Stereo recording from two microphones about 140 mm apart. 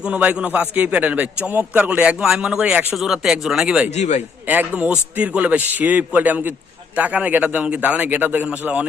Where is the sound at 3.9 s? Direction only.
55° left (ahead or behind).